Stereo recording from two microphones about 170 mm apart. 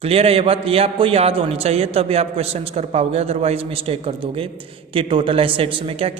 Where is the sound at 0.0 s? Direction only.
35° right (ahead or behind).